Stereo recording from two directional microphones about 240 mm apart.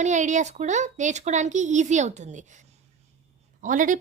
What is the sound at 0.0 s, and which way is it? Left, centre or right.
A woman's voice, right.